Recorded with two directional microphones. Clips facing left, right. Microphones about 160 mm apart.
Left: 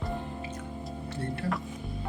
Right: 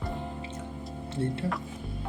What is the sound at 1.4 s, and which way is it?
Speech, 25° right (ahead or behind).